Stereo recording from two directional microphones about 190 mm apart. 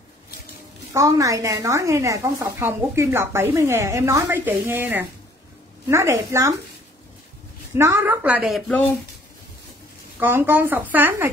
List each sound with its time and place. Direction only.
0.9 s a woman's voice: 15° right (ahead or behind)
7.7 s a woman's voice: 10° right (ahead or behind); by 8.9 s 5° left (ahead or behind)
10.1 s a woman's voice: 10° right (ahead or behind)